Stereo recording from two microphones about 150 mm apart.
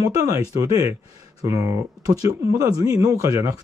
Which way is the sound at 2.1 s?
25° right (ahead or behind).